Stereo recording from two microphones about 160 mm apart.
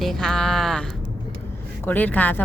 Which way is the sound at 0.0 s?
5° left (ahead or behind).